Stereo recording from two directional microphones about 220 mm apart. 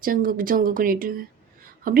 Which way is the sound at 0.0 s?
40° right (ahead or behind).